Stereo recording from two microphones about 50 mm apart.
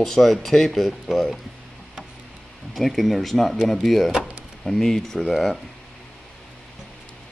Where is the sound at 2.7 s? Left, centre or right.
Centre.